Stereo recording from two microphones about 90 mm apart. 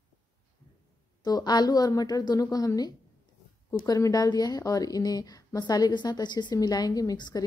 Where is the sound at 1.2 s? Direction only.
50° left (ahead or behind).